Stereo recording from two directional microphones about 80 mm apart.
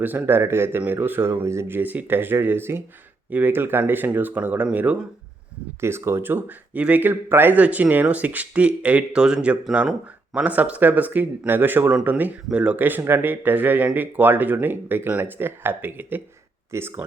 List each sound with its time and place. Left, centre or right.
0.0 s speech: right
5.8 s speech: right
16.7 s speech: right